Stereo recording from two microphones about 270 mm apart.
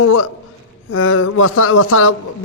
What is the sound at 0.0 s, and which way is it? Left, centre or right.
Speech, left.